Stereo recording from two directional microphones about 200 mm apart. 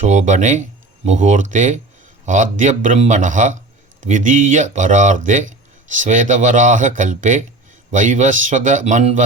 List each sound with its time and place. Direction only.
0.0 s speech: 35° right (ahead or behind)